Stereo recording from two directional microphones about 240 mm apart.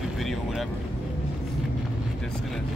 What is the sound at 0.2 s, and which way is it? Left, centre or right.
Vehicle, centre.